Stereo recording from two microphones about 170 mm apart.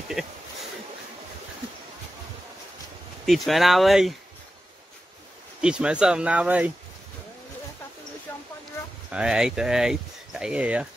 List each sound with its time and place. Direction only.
3.3 s speech: centre (ahead or behind)
5.6 s speech: 5° right (ahead or behind)
9.1 s speech: 5° right (ahead or behind)